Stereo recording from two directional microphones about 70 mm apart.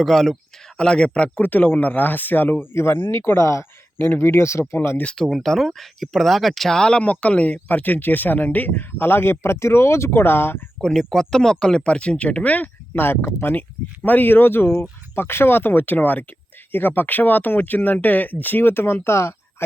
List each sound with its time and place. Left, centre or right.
0.0 s speech: centre
1.4 s speech: left
3.9 s speech: left
5.0 s speech: centre; by 10.6 s left
10.8 s speech: centre; by 12.7 s left
12.9 s speech: left